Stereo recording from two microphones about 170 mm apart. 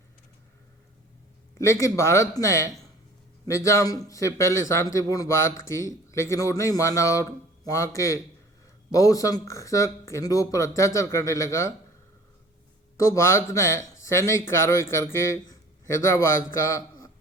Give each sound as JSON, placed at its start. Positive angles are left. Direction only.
{"t": 1.5, "sound": "a man's voice", "side_deg": 15}
{"t": 13.1, "sound": "speech", "side_deg": 15}